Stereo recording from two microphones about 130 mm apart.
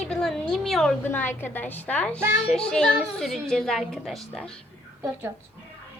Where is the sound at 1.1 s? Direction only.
15° left (ahead or behind); by 4.5 s centre (ahead or behind).